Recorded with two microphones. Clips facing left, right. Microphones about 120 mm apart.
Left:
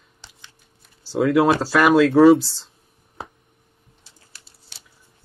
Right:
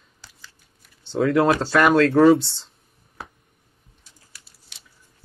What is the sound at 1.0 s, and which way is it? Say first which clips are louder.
Speech: left 2 dB; 5° left (ahead or behind).